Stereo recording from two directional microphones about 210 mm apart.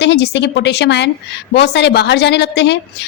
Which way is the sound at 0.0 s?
55° left (ahead or behind).